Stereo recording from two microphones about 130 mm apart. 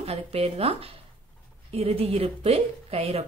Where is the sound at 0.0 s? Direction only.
50° right (ahead or behind).